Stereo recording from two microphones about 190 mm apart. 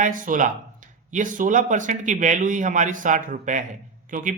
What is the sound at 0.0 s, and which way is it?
Speech, 45° right (ahead or behind).